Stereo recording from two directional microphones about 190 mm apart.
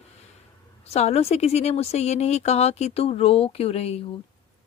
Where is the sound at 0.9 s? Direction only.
35° left (ahead or behind).